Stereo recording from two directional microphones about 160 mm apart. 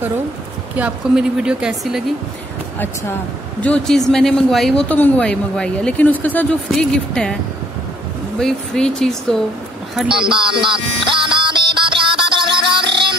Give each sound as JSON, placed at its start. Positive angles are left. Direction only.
{"t": 0.7, "sound": "speech", "side_deg": -5}
{"t": 3.6, "sound": "speech", "side_deg": 5}
{"t": 8.4, "sound": "speech", "side_deg": 5}
{"t": 10.2, "sound": "music", "side_deg": -30}